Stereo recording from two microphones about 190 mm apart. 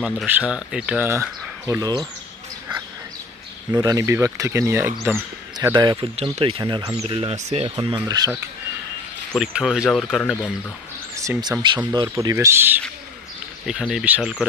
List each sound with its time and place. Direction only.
0.0 s speech: 5° right (ahead or behind); by 2.0 s 20° right (ahead or behind)
3.8 s speech: 15° right (ahead or behind); by 7.7 s 35° right (ahead or behind)
7.7 s speech: 20° right (ahead or behind)
9.3 s speech: 5° right (ahead or behind)
11.1 s speech: 15° right (ahead or behind)